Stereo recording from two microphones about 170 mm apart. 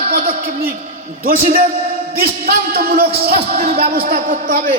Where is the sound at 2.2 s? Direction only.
65° right (ahead or behind).